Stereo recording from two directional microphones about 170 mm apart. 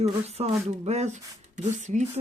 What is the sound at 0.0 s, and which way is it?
Speech, 40° right (ahead or behind).